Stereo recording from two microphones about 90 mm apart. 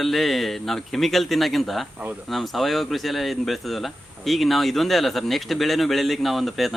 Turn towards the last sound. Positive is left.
turn(degrees=0)  # may be behind; listen again after turning